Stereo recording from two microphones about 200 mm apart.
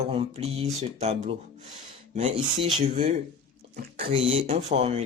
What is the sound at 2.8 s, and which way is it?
Speech, 35° right (ahead or behind).